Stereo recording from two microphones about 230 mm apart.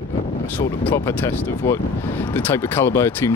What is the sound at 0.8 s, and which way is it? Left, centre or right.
Speech, centre.